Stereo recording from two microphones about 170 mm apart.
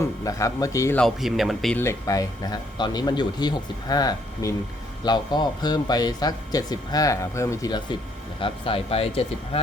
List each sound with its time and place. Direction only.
0.3 s speech: 20° left (ahead or behind)
0.9 s speech: centre (ahead or behind)
1.7 s speech: 15° left (ahead or behind); by 9.6 s 35° left (ahead or behind)